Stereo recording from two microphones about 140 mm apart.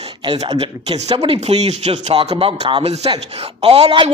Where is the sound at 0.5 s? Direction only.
45° right (ahead or behind).